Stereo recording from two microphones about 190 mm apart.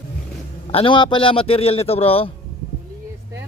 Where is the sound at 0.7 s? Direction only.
25° left (ahead or behind).